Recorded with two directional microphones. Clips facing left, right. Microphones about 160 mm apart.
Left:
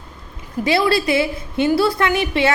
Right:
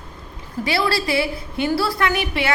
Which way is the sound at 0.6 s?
20° left (ahead or behind).